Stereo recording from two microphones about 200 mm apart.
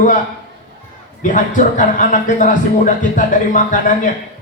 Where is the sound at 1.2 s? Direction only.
40° left (ahead or behind).